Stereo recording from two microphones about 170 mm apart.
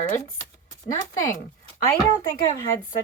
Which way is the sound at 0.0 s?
55° left (ahead or behind).